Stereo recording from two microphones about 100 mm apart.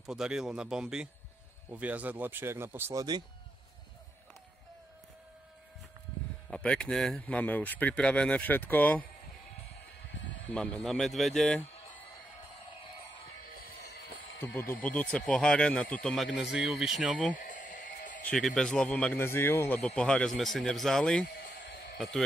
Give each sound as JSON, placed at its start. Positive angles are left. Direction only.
{"t": 0.0, "sound": "speech", "side_deg": -5}
{"t": 3.0, "sound": "speech", "side_deg": -45}
{"t": 6.5, "sound": "speech", "side_deg": 10}
{"t": 10.5, "sound": "speech", "side_deg": 10}
{"t": 10.9, "sound": "speech", "side_deg": 0}
{"t": 14.4, "sound": "speech", "side_deg": 15}
{"t": 16.3, "sound": "speech", "side_deg": -5}
{"t": 18.2, "sound": "speech", "side_deg": 5}
{"t": 19.1, "sound": "speech", "side_deg": 25}
{"t": 20.0, "sound": "speech", "side_deg": 10}